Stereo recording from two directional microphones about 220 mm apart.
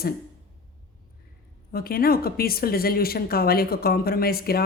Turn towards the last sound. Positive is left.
turn(degrees=45)  # may be behind; listen again after turning